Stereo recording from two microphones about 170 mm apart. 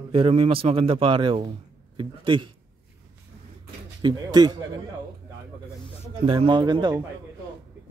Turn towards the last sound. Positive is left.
turn(degrees=-25)  # may be behind; listen again after turning